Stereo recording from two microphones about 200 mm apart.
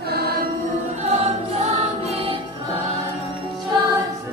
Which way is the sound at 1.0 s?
30° right (ahead or behind).